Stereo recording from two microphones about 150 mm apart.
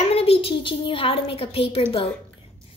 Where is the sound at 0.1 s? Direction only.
40° left (ahead or behind).